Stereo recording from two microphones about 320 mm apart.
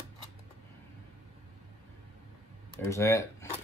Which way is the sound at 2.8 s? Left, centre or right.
Centre.